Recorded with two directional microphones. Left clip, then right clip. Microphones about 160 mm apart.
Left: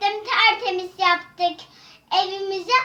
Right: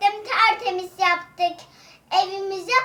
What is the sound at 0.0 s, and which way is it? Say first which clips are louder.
Child singing: even; 20° right (ahead or behind).